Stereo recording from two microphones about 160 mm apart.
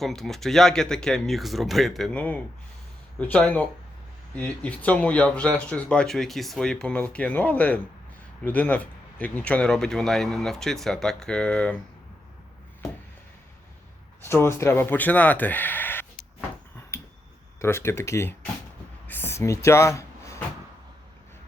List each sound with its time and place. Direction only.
0.0 s speech: centre (ahead or behind)
14.3 s speech: 15° left (ahead or behind)
16.9 s finger snapping: 15° left (ahead or behind)
17.6 s speech: 15° left (ahead or behind)
19.0 s a sound: 10° left (ahead or behind)